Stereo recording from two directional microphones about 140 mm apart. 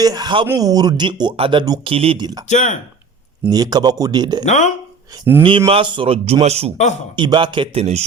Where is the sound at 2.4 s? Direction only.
60° left (ahead or behind).